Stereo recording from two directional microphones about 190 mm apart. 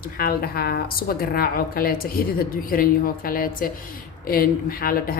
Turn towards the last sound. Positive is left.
turn(degrees=50)  # may be behind; listen again after turning